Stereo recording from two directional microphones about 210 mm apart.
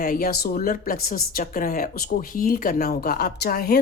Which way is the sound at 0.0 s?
45° left (ahead or behind).